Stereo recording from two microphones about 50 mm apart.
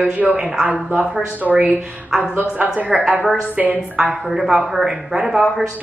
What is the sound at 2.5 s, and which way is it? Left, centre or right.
A woman's voice, right.